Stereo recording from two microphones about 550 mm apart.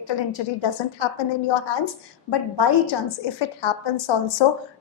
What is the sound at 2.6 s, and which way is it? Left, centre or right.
A woman's voice, left.